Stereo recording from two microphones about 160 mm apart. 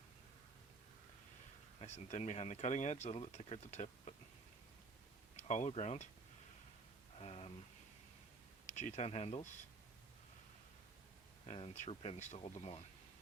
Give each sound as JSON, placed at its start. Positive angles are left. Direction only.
{"t": 1.8, "sound": "speech", "side_deg": 45}
{"t": 5.4, "sound": "speech", "side_deg": 45}
{"t": 7.2, "sound": "a sound", "side_deg": 40}
{"t": 8.6, "sound": "speech", "side_deg": 45}
{"t": 11.4, "sound": "speech", "side_deg": 40}